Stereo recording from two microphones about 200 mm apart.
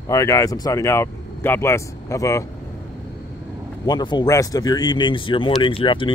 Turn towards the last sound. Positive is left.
turn(degrees=25)  # may be behind; listen again after turning